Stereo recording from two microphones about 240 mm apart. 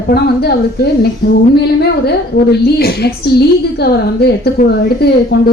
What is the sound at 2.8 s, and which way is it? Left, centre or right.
Speech, left.